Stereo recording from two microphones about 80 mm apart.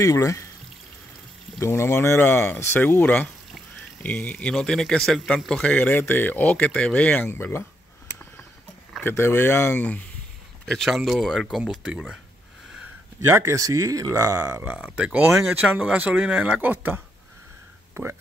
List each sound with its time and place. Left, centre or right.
0.0 s speech: left
1.6 s speech: left; by 7.2 s centre
9.0 s speech: left
9.7 s speech: centre
10.6 s a sound: centre
11.1 s speech: centre
13.3 s speech: right
14.6 s speech: centre